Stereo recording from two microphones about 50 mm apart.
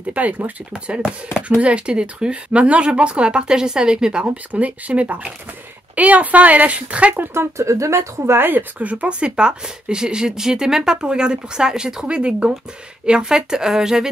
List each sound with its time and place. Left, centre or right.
0.1 s speech: right
4.5 s speech: right
7.3 s speech: right
8.4 s speech: right
8.7 s speech: right; by 12.2 s centre
12.2 s speech: right